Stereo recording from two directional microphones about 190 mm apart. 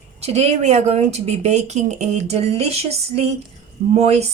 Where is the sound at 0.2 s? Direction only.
35° right (ahead or behind).